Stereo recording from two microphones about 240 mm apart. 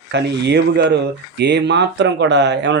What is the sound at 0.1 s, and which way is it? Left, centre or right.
Speech, right.